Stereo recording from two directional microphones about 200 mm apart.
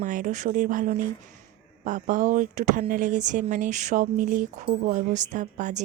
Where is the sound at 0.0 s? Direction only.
40° right (ahead or behind).